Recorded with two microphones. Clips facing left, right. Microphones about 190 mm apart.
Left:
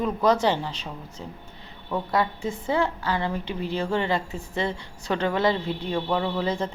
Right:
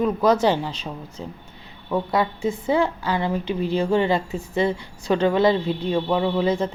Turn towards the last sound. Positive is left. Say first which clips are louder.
# right 5 dB
turn(degrees=-10)  # may be behind; listen again after turning